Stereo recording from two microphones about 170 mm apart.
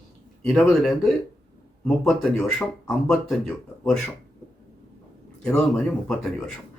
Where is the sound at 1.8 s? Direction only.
5° left (ahead or behind).